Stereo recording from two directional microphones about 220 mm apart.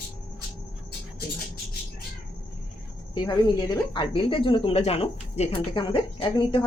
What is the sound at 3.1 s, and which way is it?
Speech, 20° left (ahead or behind).